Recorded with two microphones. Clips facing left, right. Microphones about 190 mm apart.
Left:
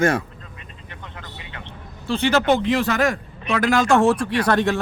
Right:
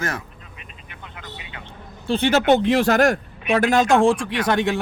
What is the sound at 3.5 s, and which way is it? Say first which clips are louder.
Speech: right 1 dB; 25° right (ahead or behind).